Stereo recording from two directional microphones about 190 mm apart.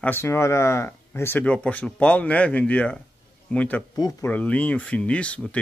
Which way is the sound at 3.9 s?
20° left (ahead or behind).